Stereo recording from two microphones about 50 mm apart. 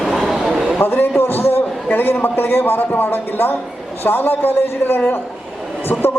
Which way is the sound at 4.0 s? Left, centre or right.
Left.